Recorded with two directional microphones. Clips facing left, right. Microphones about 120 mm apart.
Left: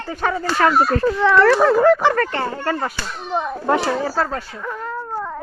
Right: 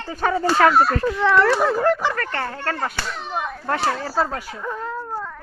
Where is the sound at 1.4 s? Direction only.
85° left.